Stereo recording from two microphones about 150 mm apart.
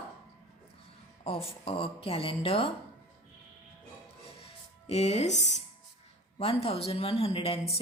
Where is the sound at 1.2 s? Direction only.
40° left (ahead or behind).